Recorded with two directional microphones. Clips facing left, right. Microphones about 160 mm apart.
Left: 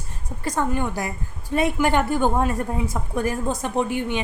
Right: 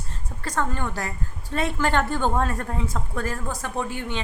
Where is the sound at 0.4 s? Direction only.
15° left (ahead or behind).